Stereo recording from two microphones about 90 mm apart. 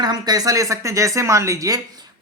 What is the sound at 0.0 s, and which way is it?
A man's voice, 45° right (ahead or behind).